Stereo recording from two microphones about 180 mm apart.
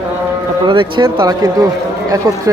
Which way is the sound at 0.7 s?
25° right (ahead or behind).